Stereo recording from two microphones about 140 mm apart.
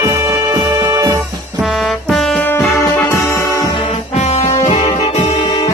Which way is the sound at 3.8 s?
50° left (ahead or behind).